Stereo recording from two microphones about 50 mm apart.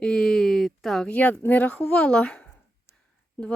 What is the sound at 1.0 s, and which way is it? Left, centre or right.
Speech, left.